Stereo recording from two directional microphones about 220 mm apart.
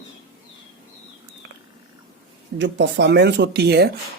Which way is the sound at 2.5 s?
55° right (ahead or behind).